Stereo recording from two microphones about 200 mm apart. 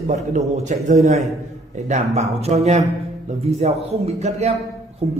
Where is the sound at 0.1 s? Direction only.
40° right (ahead or behind).